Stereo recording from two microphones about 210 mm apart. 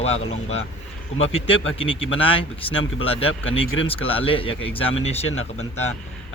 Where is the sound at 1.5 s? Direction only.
25° left (ahead or behind).